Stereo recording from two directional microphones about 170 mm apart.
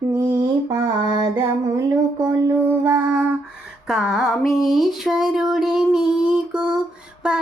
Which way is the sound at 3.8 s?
Centre (ahead or behind).